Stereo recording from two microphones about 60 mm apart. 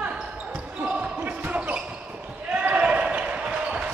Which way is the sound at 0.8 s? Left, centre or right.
Right.